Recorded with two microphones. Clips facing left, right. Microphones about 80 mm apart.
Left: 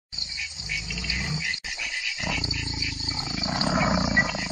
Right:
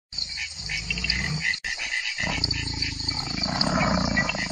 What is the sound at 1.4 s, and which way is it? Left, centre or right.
Dog, right.